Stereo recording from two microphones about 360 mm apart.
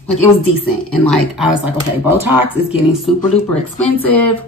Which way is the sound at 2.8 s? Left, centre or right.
Centre.